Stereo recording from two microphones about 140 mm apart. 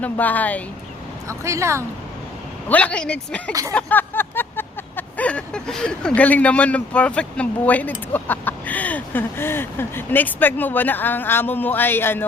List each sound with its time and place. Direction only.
0.0 s speech: 10° left (ahead or behind)
1.3 s speech: 20° right (ahead or behind)
2.6 s speech: 10° left (ahead or behind)
3.7 s a sound: 10° left (ahead or behind)